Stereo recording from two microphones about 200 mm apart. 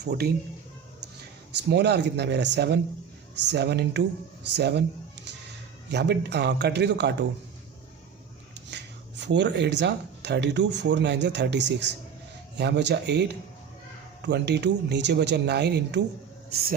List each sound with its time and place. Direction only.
0.0 s speech: 50° right (ahead or behind)
1.7 s speech: 55° right (ahead or behind)
5.9 s speech: 55° right (ahead or behind)
8.5 s speech: 60° right (ahead or behind)